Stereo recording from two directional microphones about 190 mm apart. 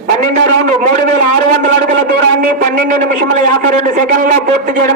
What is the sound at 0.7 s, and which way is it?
Speech, 40° right (ahead or behind).